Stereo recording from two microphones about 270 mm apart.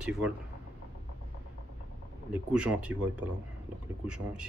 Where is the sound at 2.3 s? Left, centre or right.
Centre.